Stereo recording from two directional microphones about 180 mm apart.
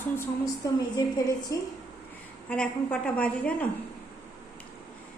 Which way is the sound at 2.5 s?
5° left (ahead or behind).